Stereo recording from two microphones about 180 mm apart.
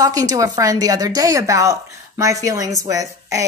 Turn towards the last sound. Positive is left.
turn(degrees=-20)  # may be behind; listen again after turning